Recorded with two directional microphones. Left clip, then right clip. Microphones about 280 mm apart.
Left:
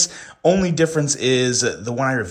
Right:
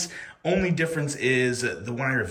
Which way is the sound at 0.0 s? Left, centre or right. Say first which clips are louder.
Left 12 dB; centre.